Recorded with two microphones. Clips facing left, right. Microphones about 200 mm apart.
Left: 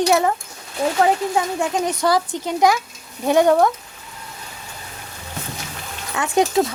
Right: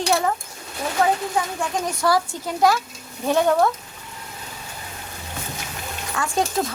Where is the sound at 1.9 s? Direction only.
20° left (ahead or behind).